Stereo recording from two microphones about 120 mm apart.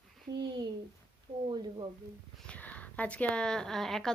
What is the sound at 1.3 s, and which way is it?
Speech, 65° right (ahead or behind).